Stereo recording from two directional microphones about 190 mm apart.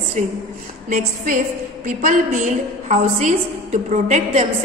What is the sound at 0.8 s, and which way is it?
A woman's voice, 45° right (ahead or behind).